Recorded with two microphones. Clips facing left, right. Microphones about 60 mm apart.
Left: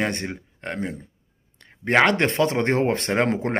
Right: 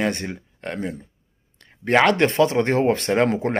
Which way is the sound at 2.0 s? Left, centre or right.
Left.